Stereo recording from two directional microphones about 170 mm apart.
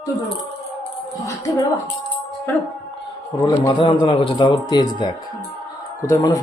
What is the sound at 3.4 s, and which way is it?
A man's voice, 25° left (ahead or behind).